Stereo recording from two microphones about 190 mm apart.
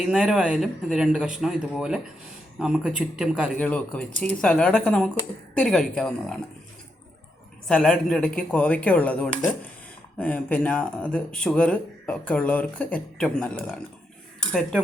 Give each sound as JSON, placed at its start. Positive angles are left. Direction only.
{"t": 0.0, "sound": "speech", "side_deg": -5}
{"t": 7.7, "sound": "speech", "side_deg": 5}